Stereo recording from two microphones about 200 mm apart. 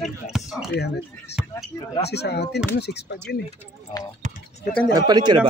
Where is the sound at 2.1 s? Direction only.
55° left (ahead or behind).